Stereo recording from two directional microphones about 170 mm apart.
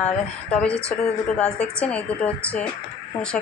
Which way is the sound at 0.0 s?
5° left (ahead or behind).